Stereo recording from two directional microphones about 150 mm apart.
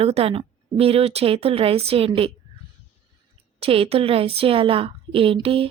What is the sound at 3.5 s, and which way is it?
A woman's voice, 40° right (ahead or behind).